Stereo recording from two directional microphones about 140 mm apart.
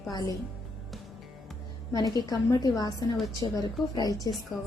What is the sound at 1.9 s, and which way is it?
A woman's voice, 30° left (ahead or behind).